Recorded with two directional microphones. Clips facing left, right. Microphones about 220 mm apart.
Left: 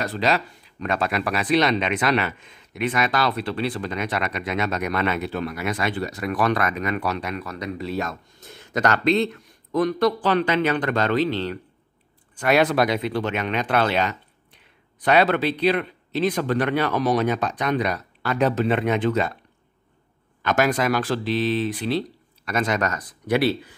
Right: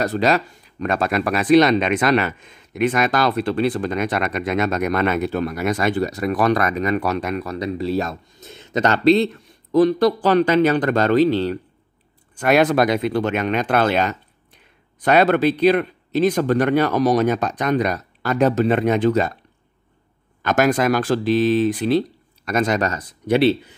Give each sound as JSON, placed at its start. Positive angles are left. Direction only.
{"t": 0.0, "sound": "speech", "side_deg": -45}
{"t": 8.4, "sound": "speech", "side_deg": -20}
{"t": 20.4, "sound": "speech", "side_deg": -45}